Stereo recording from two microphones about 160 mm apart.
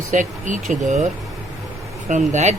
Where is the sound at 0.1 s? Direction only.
50° right (ahead or behind).